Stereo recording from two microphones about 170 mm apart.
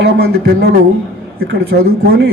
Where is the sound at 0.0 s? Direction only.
75° right (ahead or behind).